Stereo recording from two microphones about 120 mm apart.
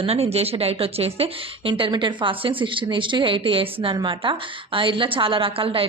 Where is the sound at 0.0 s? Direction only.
60° right (ahead or behind).